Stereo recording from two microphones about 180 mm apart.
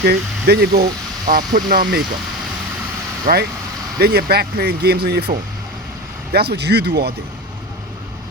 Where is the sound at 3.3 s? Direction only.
50° right (ahead or behind).